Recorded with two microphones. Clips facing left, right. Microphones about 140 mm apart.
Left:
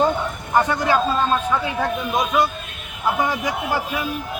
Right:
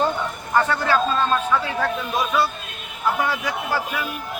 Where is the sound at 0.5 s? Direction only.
15° left (ahead or behind).